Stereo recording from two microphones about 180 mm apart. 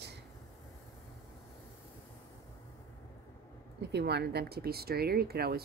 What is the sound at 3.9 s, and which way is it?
Speech, 65° right (ahead or behind).